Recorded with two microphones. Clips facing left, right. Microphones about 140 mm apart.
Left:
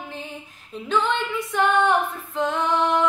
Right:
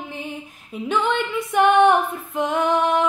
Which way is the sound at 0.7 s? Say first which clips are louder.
Right 2 dB; 10° right (ahead or behind).